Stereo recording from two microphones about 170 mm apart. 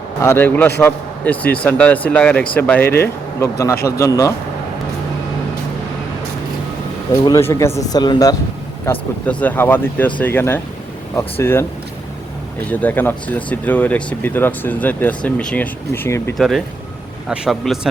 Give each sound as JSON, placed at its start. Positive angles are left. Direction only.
{"t": 0.2, "sound": "speech", "side_deg": 15}
{"t": 7.3, "sound": "speech", "side_deg": 20}
{"t": 8.9, "sound": "speech", "side_deg": 10}
{"t": 12.8, "sound": "speech", "side_deg": 10}
{"t": 16.4, "sound": "a man's voice", "side_deg": 0}